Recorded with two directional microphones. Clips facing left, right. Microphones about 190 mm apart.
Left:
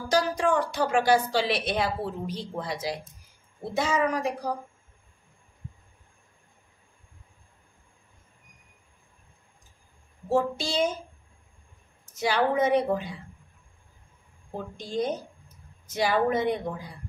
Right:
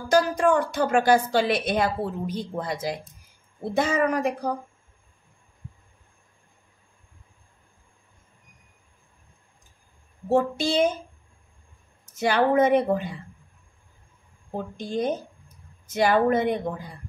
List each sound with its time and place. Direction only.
0.1 s a woman's voice: 50° right (ahead or behind)
10.3 s a woman's voice: 55° right (ahead or behind)
12.2 s a woman's voice: 55° right (ahead or behind)
14.8 s speech: 55° right (ahead or behind)